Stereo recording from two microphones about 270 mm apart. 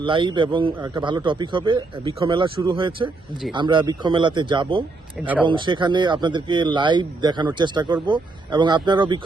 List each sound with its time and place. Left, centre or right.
0.0 s a man's voice: centre
5.2 s speech: centre
5.5 s a man's voice: centre